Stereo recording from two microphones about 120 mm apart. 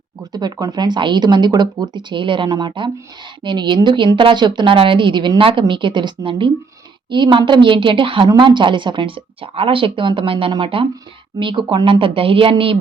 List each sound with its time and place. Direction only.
0.2 s a woman's voice: 35° right (ahead or behind)